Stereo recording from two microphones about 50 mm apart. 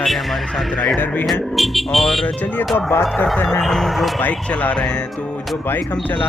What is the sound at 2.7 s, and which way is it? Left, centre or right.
Speech, left.